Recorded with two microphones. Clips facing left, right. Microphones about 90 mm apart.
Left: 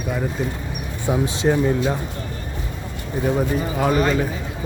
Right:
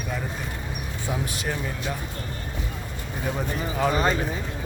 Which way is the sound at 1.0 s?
20° left (ahead or behind).